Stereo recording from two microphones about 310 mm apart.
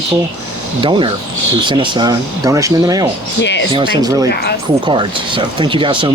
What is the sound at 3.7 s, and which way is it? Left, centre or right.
Speech, centre.